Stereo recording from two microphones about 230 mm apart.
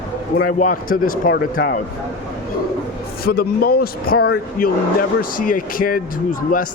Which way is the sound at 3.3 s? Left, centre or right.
Left.